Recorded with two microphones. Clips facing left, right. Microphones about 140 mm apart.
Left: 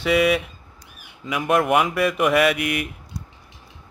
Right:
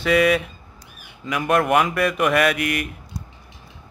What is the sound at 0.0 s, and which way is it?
A man's voice, 10° left (ahead or behind).